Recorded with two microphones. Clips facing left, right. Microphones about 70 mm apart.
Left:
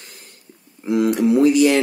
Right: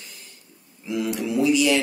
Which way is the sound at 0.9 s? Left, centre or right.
Left.